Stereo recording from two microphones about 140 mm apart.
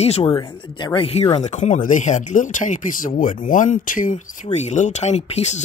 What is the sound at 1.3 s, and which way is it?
Speech, 55° left (ahead or behind).